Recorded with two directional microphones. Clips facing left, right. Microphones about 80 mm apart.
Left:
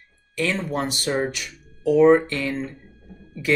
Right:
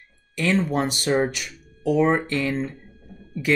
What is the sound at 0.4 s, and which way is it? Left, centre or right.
Speech, right.